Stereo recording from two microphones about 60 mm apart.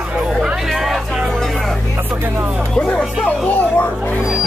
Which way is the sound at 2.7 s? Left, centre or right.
Centre.